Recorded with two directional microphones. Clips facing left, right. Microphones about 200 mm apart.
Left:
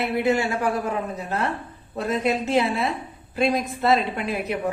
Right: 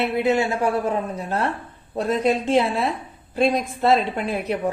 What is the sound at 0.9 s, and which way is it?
A woman's voice, 30° right (ahead or behind).